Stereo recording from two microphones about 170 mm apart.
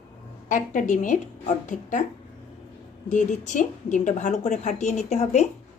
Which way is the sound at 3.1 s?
45° left (ahead or behind).